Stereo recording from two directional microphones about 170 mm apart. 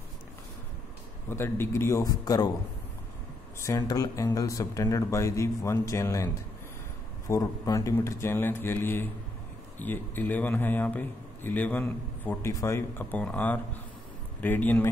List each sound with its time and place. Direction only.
1.3 s a man's voice: 15° left (ahead or behind)
3.5 s a man's voice: 20° left (ahead or behind)